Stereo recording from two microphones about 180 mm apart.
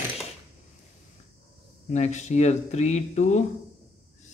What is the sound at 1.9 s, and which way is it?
Speech, 40° left (ahead or behind).